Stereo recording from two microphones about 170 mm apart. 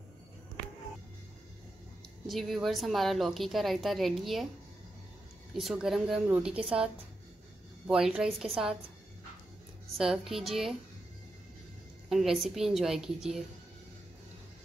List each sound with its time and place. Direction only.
2.2 s a woman's voice: centre (ahead or behind)
5.5 s a woman's voice: centre (ahead or behind)
9.9 s a woman's voice: 5° right (ahead or behind)
12.1 s a woman's voice: centre (ahead or behind)